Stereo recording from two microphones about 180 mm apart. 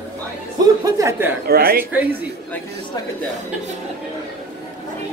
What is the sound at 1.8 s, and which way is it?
Speech, 10° right (ahead or behind).